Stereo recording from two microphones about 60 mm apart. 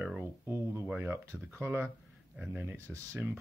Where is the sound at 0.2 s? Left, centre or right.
Right.